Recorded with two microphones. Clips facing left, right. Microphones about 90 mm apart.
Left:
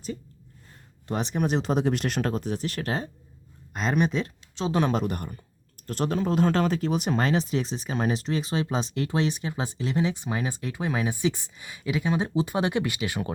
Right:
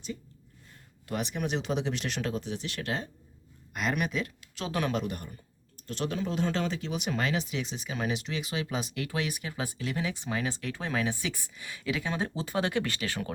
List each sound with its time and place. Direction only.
1.0 s speech: 35° left (ahead or behind)
5.0 s speech: 55° left (ahead or behind); by 13.3 s 15° left (ahead or behind)